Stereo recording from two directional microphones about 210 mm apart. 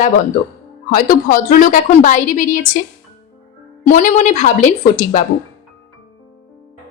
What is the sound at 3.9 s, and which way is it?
A woman's voice, 40° left (ahead or behind).